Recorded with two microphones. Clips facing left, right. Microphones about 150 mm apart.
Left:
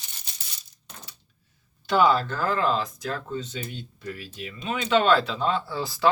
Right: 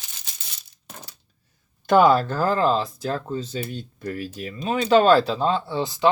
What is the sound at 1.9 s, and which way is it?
Speech, 45° right (ahead or behind).